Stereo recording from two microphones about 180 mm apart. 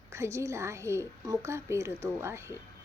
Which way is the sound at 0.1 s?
15° right (ahead or behind).